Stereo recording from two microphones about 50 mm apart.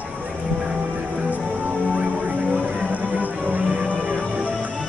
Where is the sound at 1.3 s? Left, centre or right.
Right.